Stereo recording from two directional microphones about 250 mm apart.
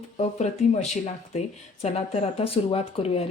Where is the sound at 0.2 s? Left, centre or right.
Left.